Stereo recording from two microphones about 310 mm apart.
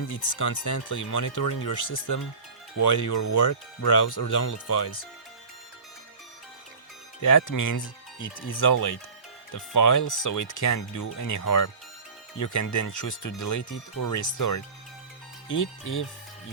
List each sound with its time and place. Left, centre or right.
0.1 s speech: left
7.2 s speech: left